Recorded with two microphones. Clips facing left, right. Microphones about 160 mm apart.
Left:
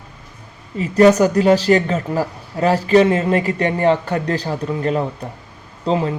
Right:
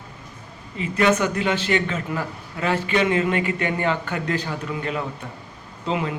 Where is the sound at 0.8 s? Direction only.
40° left (ahead or behind).